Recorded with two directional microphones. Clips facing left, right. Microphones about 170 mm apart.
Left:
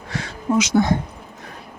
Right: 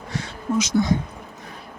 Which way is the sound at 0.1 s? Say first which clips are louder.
Left 3 dB; 90° left.